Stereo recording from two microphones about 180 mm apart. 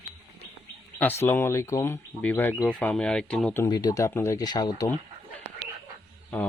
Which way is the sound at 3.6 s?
20° left (ahead or behind).